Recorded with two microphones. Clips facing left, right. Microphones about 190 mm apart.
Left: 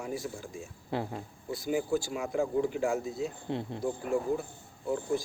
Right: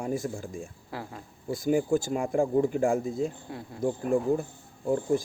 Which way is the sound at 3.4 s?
25° left (ahead or behind).